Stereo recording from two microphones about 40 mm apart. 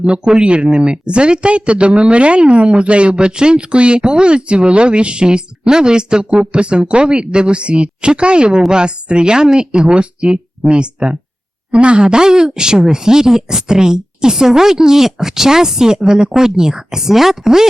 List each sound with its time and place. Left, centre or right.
0.0 s speech: right